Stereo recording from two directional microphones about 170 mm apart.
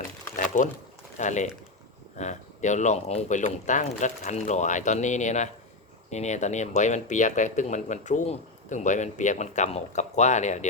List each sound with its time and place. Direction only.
1.2 s speech: 45° left (ahead or behind)